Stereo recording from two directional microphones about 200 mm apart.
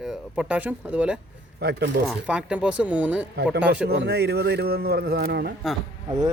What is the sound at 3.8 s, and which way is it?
Speech, 55° right (ahead or behind).